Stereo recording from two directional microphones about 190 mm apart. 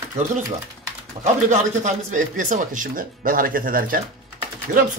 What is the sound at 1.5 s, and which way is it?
Speech, 40° right (ahead or behind).